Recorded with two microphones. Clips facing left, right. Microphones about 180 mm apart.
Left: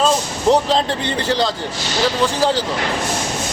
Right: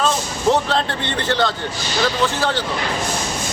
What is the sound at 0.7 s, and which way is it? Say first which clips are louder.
A man's voice: left 3 dB; 35° left (ahead or behind).